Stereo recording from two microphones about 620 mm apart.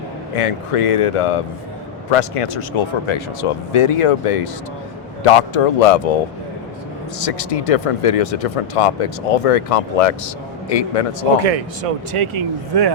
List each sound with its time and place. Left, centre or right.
0.3 s speech: left
7.2 s speech: left
11.3 s speech: right